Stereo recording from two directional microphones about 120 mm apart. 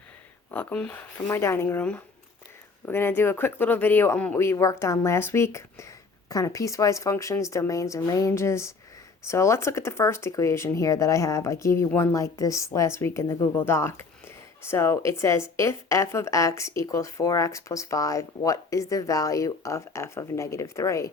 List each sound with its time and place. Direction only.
0.5 s speech: 10° left (ahead or behind)
1.3 s speech: 20° left (ahead or behind)
2.8 s speech: 15° left (ahead or behind)